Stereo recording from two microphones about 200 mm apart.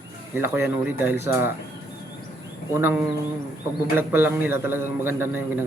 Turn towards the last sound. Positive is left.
turn(degrees=-10)  # may be behind; listen again after turning